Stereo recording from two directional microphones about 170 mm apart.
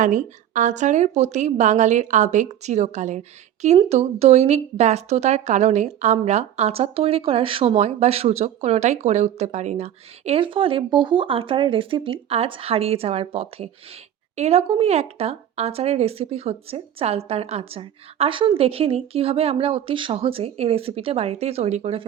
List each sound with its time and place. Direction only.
0.0 s a woman's voice: 50° right (ahead or behind)